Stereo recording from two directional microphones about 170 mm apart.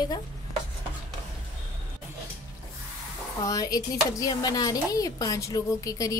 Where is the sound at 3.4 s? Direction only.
20° left (ahead or behind).